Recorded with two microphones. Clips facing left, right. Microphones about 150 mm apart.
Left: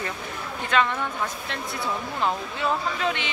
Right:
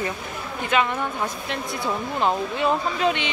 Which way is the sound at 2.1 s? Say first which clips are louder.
Right 6 dB; 20° right (ahead or behind).